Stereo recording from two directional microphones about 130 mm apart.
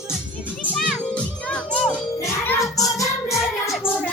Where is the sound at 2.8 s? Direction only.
25° left (ahead or behind).